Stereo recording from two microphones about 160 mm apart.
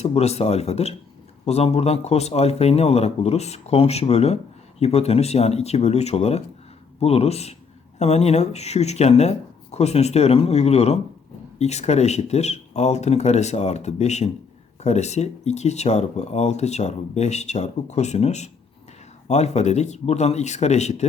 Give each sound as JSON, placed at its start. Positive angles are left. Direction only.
{"t": 0.0, "sound": "a man's voice", "side_deg": 40}